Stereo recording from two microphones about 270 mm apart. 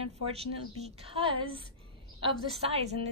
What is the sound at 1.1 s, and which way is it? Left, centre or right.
Speech, centre.